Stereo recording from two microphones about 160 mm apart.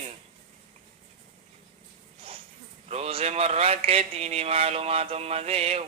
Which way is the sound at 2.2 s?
35° right (ahead or behind).